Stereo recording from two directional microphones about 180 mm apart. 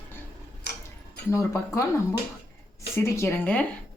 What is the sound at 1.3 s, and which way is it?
Speech, 15° left (ahead or behind).